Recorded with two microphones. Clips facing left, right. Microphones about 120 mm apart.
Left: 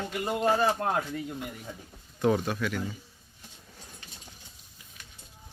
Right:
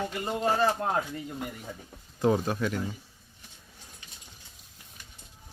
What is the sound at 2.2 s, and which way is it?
Speech, 30° right (ahead or behind).